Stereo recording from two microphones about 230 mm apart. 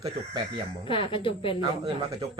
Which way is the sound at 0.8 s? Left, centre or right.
Left.